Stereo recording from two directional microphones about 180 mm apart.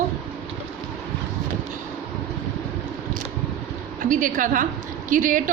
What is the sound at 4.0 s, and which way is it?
A woman's voice, 50° right (ahead or behind).